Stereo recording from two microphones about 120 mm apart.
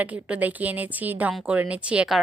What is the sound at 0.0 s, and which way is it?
Speech, 10° right (ahead or behind).